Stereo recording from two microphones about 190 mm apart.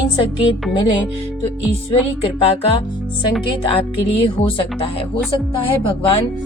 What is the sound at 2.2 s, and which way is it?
Speech, 30° left (ahead or behind).